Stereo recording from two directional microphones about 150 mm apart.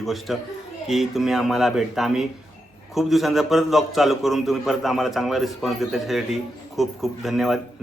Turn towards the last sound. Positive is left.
turn(degrees=0)  # may be behind; listen again after turning